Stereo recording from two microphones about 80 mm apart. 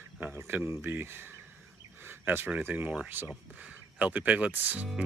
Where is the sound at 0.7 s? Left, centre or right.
Right.